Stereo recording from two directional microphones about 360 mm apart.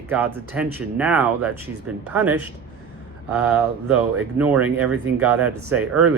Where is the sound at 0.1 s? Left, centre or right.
Centre.